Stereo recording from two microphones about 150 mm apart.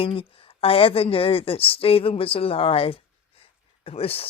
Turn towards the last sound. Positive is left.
turn(degrees=40)  # may be behind; listen again after turning